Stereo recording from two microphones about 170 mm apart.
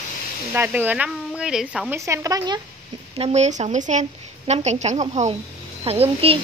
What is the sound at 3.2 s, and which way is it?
A woman's voice, 40° right (ahead or behind).